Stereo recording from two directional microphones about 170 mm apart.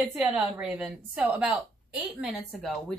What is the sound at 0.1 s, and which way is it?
A woman's voice, 5° right (ahead or behind).